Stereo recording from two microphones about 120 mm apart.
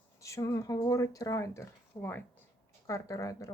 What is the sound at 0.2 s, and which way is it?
Speech, 25° left (ahead or behind).